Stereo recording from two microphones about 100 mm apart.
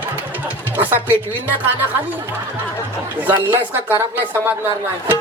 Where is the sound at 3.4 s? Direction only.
20° right (ahead or behind).